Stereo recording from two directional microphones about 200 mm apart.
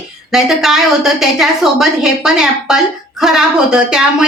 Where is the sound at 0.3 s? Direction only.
Centre (ahead or behind).